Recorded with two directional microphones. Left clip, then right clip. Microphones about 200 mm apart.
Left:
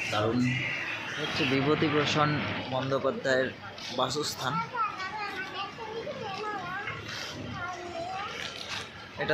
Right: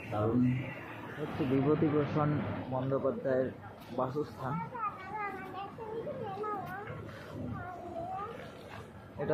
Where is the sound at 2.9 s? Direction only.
25° left (ahead or behind).